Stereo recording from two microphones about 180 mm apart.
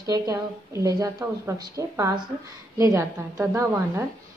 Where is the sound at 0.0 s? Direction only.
20° right (ahead or behind).